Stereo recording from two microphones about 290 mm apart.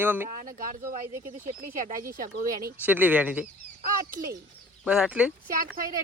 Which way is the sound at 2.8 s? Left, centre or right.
Centre.